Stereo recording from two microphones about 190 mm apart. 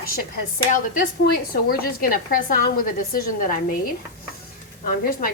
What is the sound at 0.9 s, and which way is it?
A woman's voice, 50° left (ahead or behind).